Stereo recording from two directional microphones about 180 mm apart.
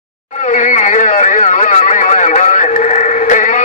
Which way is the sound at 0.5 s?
45° left (ahead or behind).